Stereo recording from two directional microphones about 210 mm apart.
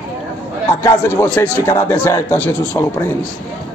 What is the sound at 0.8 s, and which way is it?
A man's voice, 10° left (ahead or behind).